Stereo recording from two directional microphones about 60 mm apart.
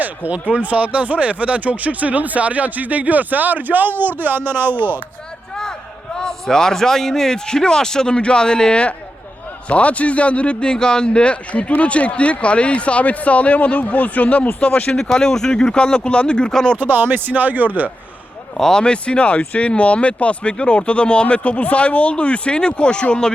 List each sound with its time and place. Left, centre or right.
0.3 s speech: right
6.1 s a man's voice: centre; by 14.9 s left
14.9 s a man's voice: centre
16.7 s speech: right
18.5 s a man's voice: centre